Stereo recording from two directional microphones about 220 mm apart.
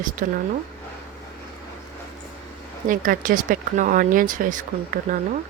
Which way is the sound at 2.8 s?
35° right (ahead or behind).